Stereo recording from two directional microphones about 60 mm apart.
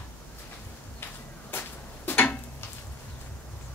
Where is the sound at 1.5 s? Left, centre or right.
Left.